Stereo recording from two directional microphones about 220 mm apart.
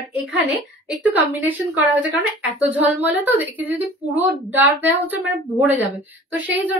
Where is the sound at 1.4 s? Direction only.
5° right (ahead or behind).